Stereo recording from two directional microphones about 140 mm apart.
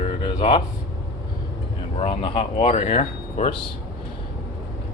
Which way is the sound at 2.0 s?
40° left (ahead or behind).